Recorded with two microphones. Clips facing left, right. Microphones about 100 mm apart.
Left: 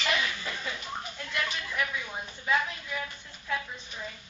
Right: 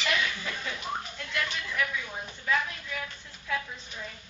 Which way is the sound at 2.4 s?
10° left (ahead or behind).